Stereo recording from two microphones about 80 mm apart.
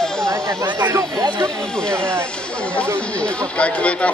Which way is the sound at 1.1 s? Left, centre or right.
Right.